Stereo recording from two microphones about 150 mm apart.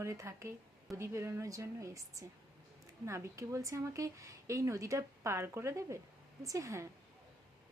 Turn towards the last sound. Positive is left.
turn(degrees=-20)  # may be behind; listen again after turning